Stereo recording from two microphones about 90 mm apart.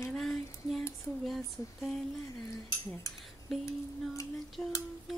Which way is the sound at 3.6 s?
40° left (ahead or behind).